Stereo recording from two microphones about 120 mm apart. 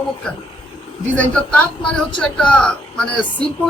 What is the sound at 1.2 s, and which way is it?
A man's voice, 10° left (ahead or behind).